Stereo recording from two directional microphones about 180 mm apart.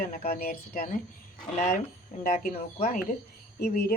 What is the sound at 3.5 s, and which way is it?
Speech, 60° left (ahead or behind).